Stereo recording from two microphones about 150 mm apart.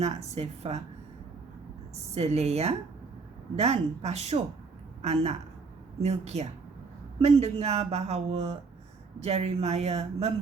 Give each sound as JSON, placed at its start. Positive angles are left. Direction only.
{"t": 0.0, "sound": "speech", "side_deg": -45}
{"t": 2.1, "sound": "speech", "side_deg": -45}